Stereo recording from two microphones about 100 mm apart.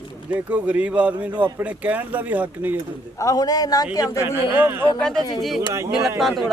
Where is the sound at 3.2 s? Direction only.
35° left (ahead or behind).